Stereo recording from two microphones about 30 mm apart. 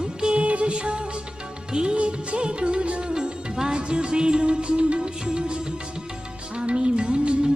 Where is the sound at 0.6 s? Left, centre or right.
Right.